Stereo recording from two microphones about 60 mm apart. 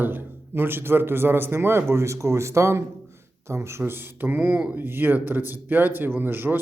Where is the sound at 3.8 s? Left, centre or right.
Right.